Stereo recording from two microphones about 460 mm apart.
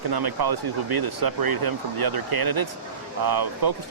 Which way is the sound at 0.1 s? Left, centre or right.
Right.